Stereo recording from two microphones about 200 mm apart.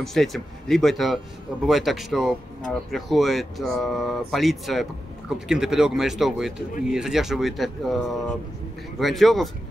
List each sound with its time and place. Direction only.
0.0 s speech: centre (ahead or behind)